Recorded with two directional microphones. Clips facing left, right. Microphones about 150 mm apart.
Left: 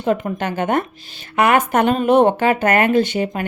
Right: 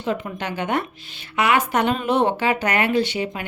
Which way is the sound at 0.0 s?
50° left (ahead or behind).